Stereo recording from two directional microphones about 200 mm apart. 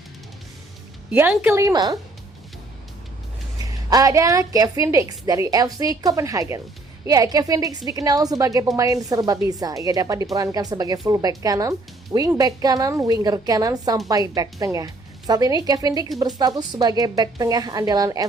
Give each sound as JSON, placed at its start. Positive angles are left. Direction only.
{"t": 1.1, "sound": "a woman's voice", "side_deg": -10}
{"t": 3.6, "sound": "a woman's voice", "side_deg": -20}